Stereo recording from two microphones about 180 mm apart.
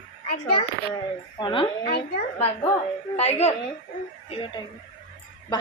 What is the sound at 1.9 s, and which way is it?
Speech, 65° left (ahead or behind).